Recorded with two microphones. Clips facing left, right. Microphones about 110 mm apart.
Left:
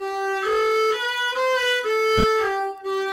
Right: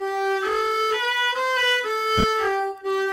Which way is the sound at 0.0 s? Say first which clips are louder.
Right 1 dB; centre (ahead or behind).